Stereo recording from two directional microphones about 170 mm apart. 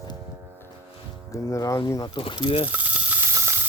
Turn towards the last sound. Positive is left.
turn(degrees=-15)  # may be behind; listen again after turning